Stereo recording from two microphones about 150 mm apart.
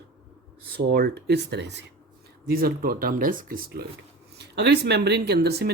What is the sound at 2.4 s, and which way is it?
Speech, 80° right.